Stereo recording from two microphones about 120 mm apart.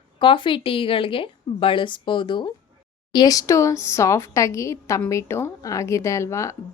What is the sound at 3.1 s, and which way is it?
A woman's voice, 30° left (ahead or behind).